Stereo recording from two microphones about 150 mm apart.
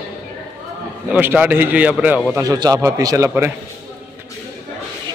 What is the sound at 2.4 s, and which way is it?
Speech, 25° right (ahead or behind).